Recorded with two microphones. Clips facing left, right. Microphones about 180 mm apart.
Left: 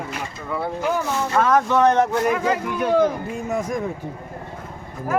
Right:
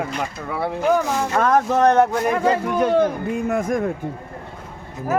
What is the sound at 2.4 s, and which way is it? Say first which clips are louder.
Speech: right 3 dB; 30° right (ahead or behind).